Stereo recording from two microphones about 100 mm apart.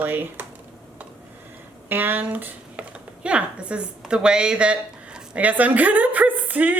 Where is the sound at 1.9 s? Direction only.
20° right (ahead or behind).